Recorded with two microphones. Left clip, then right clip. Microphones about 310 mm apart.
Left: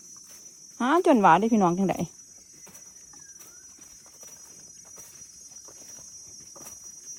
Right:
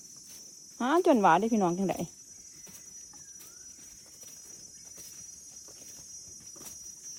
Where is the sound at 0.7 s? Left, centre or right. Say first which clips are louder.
Left 4 dB; left.